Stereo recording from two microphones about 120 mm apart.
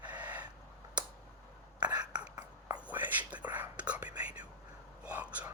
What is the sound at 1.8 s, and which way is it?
Whispering, 35° right (ahead or behind).